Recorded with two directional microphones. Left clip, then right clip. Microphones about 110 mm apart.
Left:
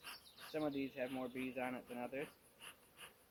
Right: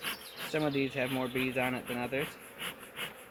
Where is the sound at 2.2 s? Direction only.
25° right (ahead or behind).